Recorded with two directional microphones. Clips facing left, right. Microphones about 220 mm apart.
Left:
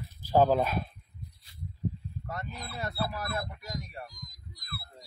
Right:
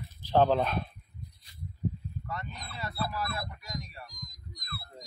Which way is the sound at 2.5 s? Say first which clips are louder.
Left 3 dB; 5° left (ahead or behind).